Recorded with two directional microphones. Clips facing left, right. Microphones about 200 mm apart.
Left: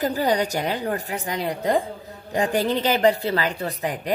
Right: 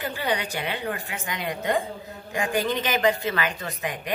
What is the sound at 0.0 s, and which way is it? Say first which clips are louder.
A woman's voice: left 6 dB; 40° left (ahead or behind).